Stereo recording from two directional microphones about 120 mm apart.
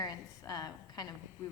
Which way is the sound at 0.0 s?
30° left (ahead or behind).